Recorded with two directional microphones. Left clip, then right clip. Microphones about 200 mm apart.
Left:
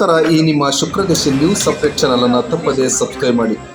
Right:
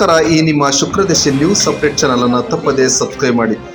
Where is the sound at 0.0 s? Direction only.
15° right (ahead or behind).